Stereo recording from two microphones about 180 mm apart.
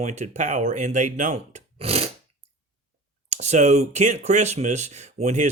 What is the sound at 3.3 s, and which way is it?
Speech, 40° right (ahead or behind).